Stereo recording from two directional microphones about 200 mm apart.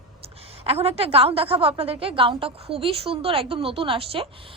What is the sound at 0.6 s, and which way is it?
A woman's voice, 30° right (ahead or behind).